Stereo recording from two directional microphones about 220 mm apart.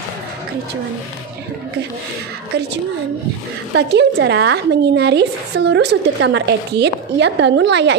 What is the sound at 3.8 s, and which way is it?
A woman's voice, 50° right (ahead or behind).